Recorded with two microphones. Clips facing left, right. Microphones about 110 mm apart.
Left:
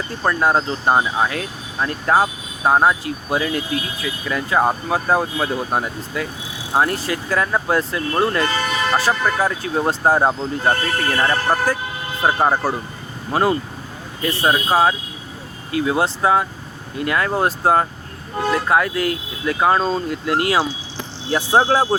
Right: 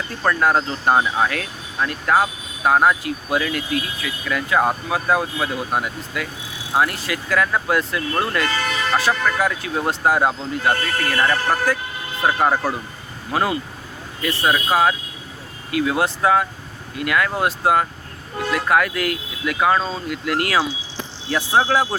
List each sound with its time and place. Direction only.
0.2 s speech: 20° left (ahead or behind)